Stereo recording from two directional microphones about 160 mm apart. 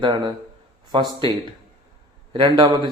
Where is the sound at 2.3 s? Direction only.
30° right (ahead or behind).